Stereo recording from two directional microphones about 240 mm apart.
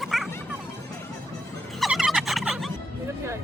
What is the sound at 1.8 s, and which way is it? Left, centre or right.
Turkey, centre.